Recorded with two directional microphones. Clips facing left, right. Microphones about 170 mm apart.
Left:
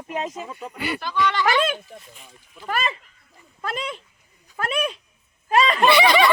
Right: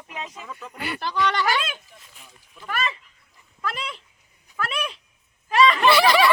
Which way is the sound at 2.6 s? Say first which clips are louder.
Left 3 dB; 30° left (ahead or behind).